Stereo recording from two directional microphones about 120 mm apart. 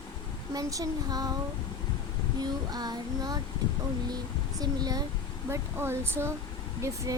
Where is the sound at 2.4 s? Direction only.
35° right (ahead or behind).